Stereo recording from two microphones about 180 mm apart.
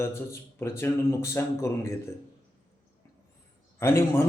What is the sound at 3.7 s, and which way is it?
Speech, 15° left (ahead or behind).